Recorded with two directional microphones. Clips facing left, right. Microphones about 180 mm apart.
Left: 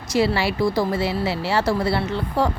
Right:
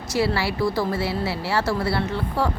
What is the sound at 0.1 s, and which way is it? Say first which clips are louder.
Speech: left 3 dB; 20° left (ahead or behind).